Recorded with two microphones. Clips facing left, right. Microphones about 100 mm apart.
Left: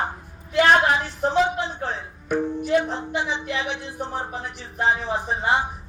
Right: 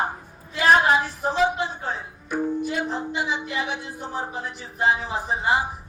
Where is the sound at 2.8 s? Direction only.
5° right (ahead or behind).